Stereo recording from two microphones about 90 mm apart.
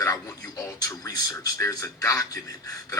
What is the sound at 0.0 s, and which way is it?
Speech, 40° left (ahead or behind).